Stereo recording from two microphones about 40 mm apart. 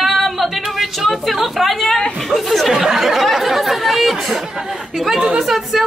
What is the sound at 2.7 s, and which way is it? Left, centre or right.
Chatter, centre.